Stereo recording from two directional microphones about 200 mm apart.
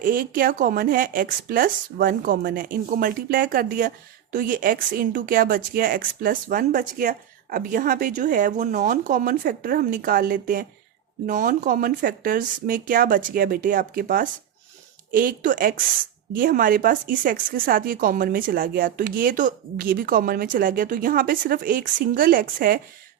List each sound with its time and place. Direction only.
0.0 s speech: 45° right (ahead or behind)